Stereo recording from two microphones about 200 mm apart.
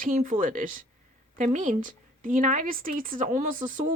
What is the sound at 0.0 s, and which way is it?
A woman's voice, 40° right (ahead or behind).